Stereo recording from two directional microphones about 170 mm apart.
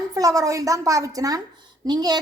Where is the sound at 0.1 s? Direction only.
20° right (ahead or behind).